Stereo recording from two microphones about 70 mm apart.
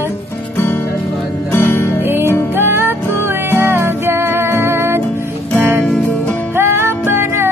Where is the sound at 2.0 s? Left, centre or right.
Right.